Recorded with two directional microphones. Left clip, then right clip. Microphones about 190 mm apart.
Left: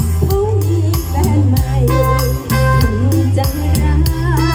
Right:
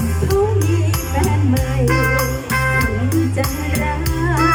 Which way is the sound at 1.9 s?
25° left (ahead or behind).